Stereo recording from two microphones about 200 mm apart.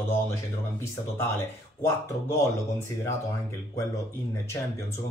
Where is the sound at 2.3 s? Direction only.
15° left (ahead or behind).